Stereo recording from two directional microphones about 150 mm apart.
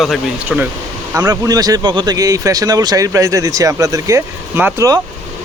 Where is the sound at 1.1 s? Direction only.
25° right (ahead or behind).